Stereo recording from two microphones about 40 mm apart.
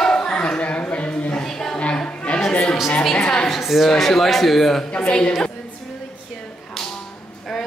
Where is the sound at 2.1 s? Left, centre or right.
Left.